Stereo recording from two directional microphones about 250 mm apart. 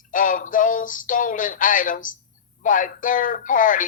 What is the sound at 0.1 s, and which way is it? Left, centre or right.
Speech, left.